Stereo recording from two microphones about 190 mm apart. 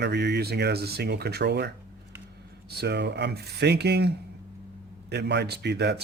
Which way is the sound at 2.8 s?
65° right (ahead or behind).